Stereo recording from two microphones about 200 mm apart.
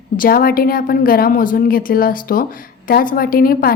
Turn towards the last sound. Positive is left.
turn(degrees=45)  # may be behind; listen again after turning